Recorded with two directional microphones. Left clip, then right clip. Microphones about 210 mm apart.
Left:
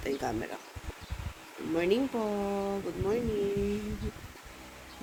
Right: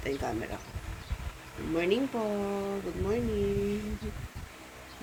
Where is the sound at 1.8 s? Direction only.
20° left (ahead or behind).